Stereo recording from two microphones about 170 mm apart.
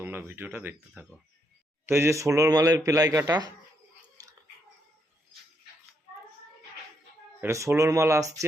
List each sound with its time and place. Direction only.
0.0 s a man's voice: 10° right (ahead or behind)
7.4 s speech: 15° right (ahead or behind)